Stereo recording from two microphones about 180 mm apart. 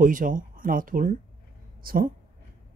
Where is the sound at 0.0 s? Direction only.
45° right (ahead or behind).